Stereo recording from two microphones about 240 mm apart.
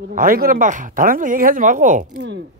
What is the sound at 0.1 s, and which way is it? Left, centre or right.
Speech, right.